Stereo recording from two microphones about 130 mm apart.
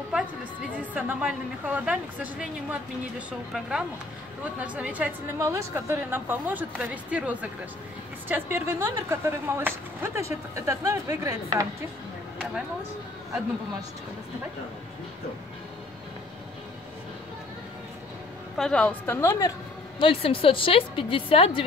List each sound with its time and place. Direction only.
0.9 s a woman's voice: 10° right (ahead or behind)
5.4 s a woman's voice: 20° right (ahead or behind)
18.6 s a woman's voice: 10° left (ahead or behind)
20.0 s a woman's voice: 45° left (ahead or behind)